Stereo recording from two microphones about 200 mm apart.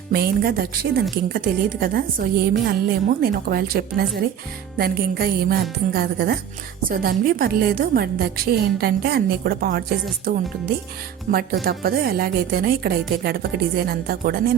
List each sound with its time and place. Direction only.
0.1 s a woman's voice: 50° right (ahead or behind)